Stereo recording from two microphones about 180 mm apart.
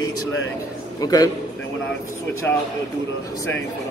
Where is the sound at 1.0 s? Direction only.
20° left (ahead or behind).